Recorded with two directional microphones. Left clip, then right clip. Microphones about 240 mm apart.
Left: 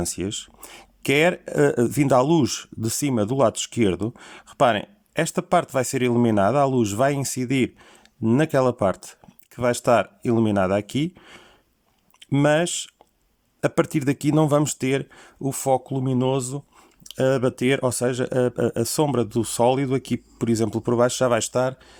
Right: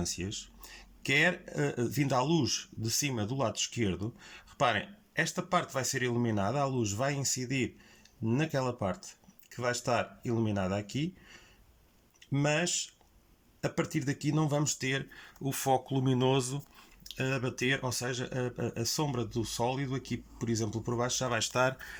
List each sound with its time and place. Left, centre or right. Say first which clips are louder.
0.0 s speech: left 9 dB; left; by 21.9 s centre